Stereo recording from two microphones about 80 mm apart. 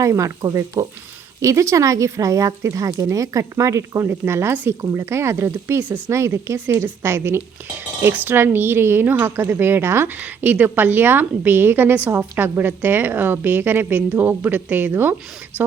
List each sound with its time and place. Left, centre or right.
0.0 s speech: right
0.4 s frying: right
1.4 s a woman's voice: right